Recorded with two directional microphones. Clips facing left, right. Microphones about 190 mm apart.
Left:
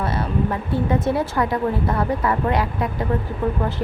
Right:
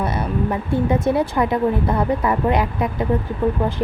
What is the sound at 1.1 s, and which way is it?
Speech, 15° right (ahead or behind).